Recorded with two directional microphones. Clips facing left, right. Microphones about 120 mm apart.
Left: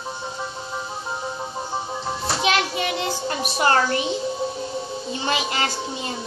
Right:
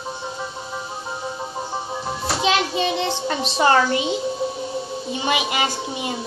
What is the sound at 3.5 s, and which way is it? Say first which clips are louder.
A woman's voice: right 3 dB; 20° right (ahead or behind).